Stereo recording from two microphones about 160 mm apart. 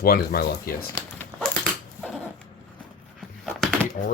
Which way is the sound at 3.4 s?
Centre (ahead or behind).